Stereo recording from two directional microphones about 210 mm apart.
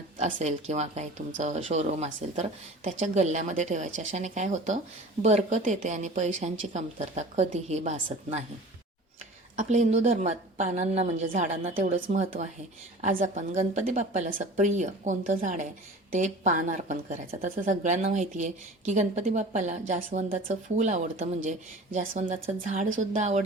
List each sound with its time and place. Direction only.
0.2 s speech: 35° right (ahead or behind)
9.6 s speech: 35° right (ahead or behind)